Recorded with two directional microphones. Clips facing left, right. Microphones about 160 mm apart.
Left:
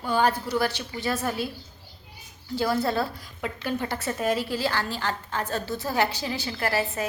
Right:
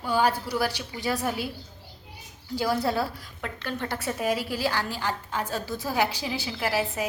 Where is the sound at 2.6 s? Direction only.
10° right (ahead or behind).